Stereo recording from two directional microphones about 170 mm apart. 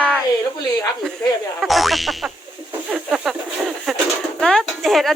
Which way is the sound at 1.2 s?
10° left (ahead or behind).